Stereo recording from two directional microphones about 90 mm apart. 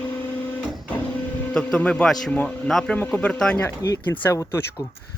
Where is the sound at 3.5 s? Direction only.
30° left (ahead or behind).